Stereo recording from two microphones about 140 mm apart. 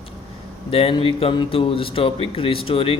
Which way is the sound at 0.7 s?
40° left (ahead or behind).